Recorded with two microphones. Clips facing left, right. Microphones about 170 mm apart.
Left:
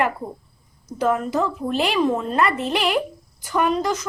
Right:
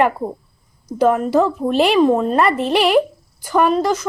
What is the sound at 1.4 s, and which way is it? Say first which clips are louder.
Speech: right 7 dB; 60° right (ahead or behind).